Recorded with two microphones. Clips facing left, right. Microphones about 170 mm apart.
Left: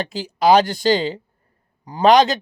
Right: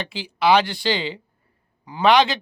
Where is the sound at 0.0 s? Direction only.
40° left (ahead or behind).